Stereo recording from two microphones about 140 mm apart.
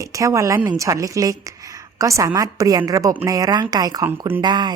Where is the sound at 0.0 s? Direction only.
25° right (ahead or behind).